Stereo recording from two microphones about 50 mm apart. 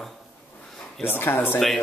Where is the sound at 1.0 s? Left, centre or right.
Left.